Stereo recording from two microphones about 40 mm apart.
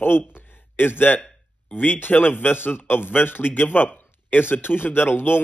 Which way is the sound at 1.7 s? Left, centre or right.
Left.